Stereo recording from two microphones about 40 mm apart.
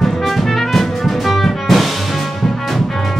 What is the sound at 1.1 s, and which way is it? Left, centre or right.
Music, centre.